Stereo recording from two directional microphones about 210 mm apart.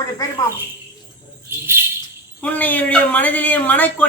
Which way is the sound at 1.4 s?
10° right (ahead or behind).